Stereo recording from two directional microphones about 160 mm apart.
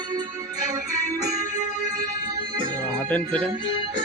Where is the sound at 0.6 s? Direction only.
20° right (ahead or behind).